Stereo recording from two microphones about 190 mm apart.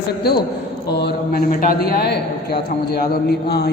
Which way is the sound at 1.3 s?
50° left (ahead or behind).